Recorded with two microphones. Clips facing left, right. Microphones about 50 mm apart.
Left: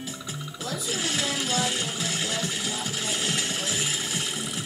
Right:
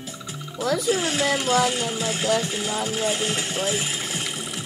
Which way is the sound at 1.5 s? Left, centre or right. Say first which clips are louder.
Right 6 dB; right.